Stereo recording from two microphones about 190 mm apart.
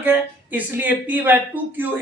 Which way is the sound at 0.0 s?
10° right (ahead or behind).